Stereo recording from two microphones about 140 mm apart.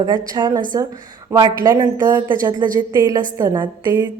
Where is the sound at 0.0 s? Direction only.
30° right (ahead or behind).